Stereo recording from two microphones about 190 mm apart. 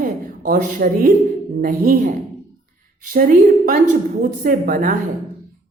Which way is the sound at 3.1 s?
50° right (ahead or behind).